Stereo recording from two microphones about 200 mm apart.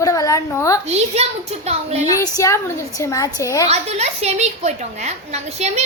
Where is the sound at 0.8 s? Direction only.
30° right (ahead or behind).